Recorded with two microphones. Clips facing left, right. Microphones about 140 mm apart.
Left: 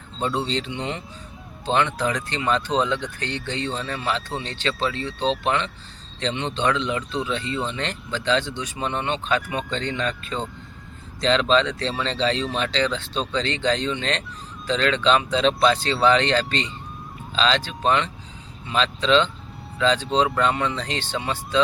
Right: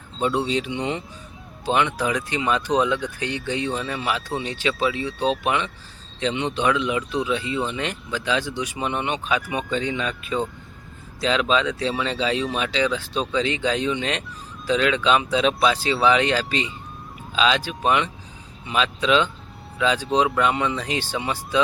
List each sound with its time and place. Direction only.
0.4 s speech: 10° right (ahead or behind)